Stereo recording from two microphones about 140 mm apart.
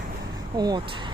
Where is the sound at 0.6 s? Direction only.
30° right (ahead or behind).